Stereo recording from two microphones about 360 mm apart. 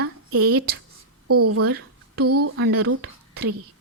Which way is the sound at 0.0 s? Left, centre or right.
Right.